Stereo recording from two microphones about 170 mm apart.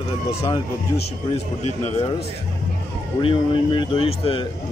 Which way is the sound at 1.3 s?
40° left (ahead or behind).